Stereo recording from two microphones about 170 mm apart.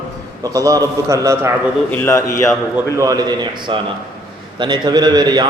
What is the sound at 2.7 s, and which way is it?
A man's voice, 20° right (ahead or behind).